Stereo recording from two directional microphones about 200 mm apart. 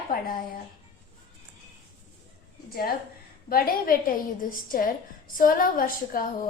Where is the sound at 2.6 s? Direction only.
50° left (ahead or behind).